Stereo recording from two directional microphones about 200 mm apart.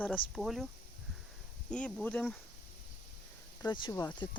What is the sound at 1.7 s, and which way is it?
Speech, 5° left (ahead or behind).